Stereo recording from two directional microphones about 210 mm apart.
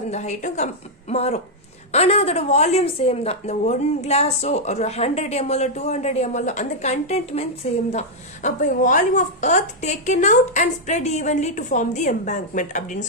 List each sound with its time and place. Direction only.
0.1 s a woman's voice: 35° left (ahead or behind)